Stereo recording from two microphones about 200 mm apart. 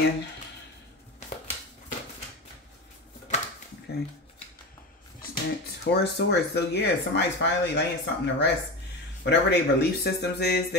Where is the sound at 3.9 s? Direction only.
55° left (ahead or behind).